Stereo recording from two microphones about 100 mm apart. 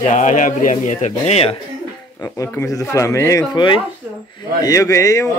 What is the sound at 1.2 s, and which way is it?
Speech, 90° left.